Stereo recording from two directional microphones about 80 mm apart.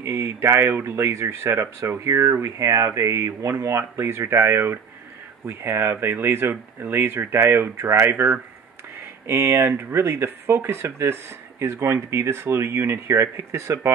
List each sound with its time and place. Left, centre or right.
0.0 s speech: right